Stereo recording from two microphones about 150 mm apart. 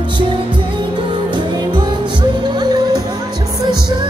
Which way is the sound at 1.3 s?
30° right (ahead or behind).